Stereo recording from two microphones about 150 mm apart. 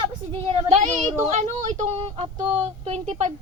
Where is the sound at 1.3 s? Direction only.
50° right (ahead or behind).